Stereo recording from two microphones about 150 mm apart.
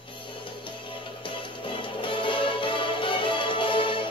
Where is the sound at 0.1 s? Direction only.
35° left (ahead or behind).